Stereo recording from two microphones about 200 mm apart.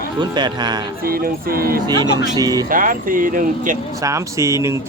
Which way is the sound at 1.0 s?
45° right (ahead or behind).